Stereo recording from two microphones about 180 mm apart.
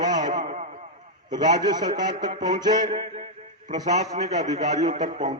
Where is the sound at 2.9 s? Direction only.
35° right (ahead or behind).